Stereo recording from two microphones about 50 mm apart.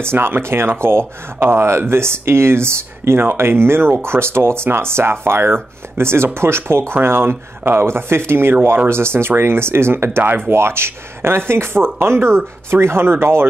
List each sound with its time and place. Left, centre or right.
0.0 s speech: right